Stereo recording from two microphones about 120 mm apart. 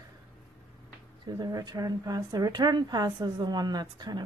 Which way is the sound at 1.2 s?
35° right (ahead or behind).